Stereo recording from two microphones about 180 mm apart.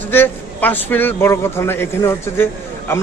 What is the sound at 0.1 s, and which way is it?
A man's voice, 10° left (ahead or behind).